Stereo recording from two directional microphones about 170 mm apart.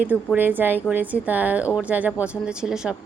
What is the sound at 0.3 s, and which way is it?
Speech, 10° right (ahead or behind).